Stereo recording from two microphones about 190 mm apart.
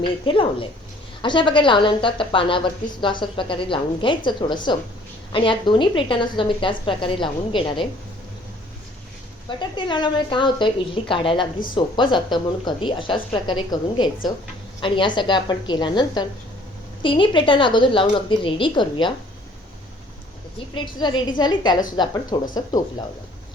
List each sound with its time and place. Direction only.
0.0 s a woman's voice: 25° left (ahead or behind)
9.6 s a woman's voice: 25° left (ahead or behind)
20.7 s a woman's voice: 25° left (ahead or behind)